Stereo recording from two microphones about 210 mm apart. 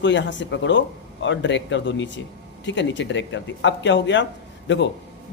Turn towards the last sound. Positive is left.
turn(degrees=60)  # may be behind; listen again after turning